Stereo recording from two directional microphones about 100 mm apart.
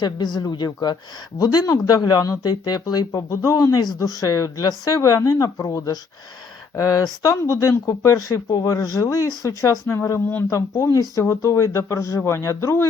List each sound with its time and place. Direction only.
0.0 s speech: 45° left (ahead or behind); by 12.9 s 30° left (ahead or behind)